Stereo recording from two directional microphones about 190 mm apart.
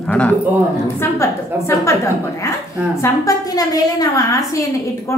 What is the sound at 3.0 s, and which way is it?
A woman's voice, 20° left (ahead or behind).